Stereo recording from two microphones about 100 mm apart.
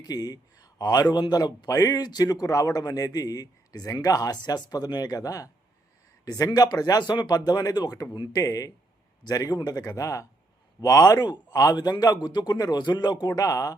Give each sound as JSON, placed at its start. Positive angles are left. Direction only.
{"t": 0.0, "sound": "speech", "side_deg": 40}